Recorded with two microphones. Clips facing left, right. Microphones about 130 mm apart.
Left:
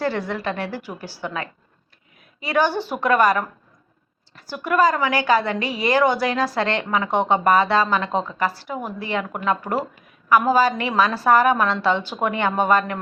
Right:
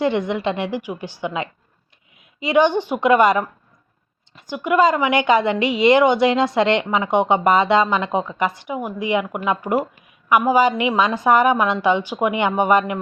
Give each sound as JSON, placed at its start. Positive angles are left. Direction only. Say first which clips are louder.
{"t": 0.0, "sound": "a woman's voice", "louder": "right 4 dB", "side_deg": -20}